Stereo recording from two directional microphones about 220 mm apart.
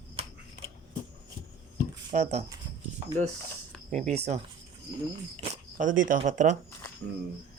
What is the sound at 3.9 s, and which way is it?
Speech, 30° right (ahead or behind).